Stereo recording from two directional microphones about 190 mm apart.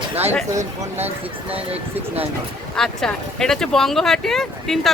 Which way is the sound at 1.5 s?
30° right (ahead or behind).